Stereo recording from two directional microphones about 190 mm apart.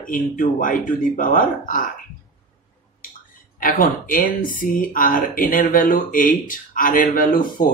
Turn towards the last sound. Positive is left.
turn(degrees=45)  # may be behind; listen again after turning